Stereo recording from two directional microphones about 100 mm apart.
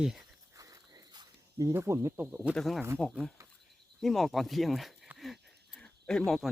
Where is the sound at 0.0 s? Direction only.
5° right (ahead or behind).